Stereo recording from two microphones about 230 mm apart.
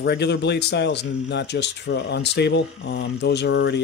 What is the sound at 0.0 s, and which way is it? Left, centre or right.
Speech, left.